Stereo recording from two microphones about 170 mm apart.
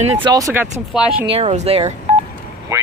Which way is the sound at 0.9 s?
5° right (ahead or behind).